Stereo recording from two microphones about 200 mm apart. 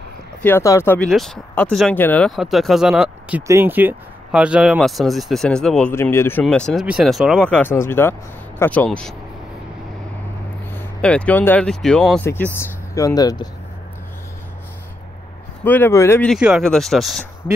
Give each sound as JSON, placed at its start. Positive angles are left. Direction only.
{"t": 0.4, "sound": "speech", "side_deg": 10}
{"t": 10.7, "sound": "speech", "side_deg": 10}
{"t": 12.5, "sound": "speech", "side_deg": 15}
{"t": 15.6, "sound": "speech", "side_deg": 10}
{"t": 16.3, "sound": "speech", "side_deg": -5}